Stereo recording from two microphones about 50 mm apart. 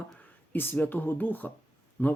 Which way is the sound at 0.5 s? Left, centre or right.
Left.